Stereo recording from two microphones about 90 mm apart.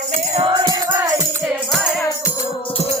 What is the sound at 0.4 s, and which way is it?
Music, 60° right (ahead or behind).